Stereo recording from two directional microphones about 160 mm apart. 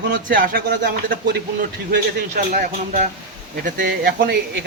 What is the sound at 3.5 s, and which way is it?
Speech, 70° right (ahead or behind).